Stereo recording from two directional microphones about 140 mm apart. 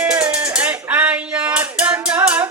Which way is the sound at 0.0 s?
10° right (ahead or behind).